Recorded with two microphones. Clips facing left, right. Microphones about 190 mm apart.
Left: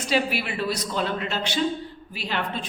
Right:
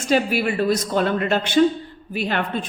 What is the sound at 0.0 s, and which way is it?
Speech, 45° right (ahead or behind).